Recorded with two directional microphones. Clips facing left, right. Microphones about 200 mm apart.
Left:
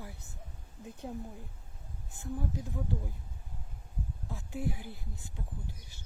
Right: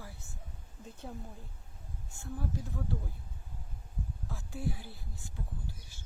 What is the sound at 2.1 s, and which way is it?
Speech, 20° left (ahead or behind).